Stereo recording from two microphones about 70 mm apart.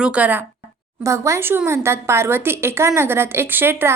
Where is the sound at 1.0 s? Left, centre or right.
Right.